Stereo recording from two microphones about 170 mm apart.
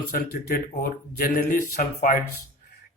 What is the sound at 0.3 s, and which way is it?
Speech, 55° left (ahead or behind).